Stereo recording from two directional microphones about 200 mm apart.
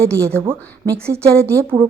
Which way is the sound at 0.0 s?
15° right (ahead or behind).